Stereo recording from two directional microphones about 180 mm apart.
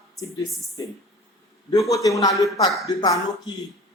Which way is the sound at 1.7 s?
20° left (ahead or behind).